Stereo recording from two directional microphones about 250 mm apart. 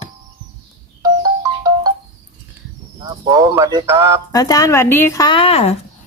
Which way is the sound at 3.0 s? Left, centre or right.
Centre.